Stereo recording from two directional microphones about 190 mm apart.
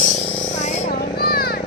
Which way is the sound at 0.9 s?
55° left (ahead or behind).